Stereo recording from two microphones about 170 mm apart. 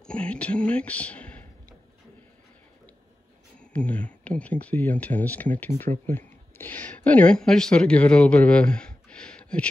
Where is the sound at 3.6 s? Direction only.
5° left (ahead or behind).